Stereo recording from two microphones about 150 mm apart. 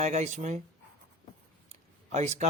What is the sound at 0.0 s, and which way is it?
Speech, 50° right (ahead or behind).